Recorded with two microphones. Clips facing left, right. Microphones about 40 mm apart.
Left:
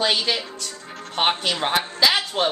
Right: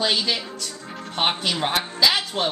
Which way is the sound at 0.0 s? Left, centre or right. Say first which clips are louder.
Left 1 dB; centre.